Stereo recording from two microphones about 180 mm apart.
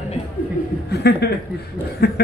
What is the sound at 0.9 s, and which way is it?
Speech, 65° left (ahead or behind).